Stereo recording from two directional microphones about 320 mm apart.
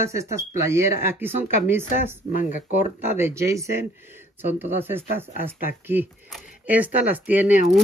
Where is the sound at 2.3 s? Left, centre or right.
Left.